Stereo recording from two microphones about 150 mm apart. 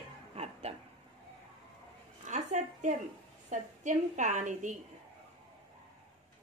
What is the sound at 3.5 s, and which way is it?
A woman's voice, 55° right (ahead or behind).